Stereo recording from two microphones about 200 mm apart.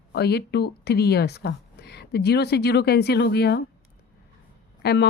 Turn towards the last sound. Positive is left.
turn(degrees=55)  # may be behind; listen again after turning